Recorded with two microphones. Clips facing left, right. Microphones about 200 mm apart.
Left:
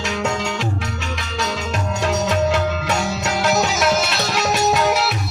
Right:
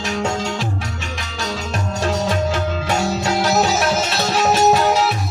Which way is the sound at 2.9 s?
35° right (ahead or behind).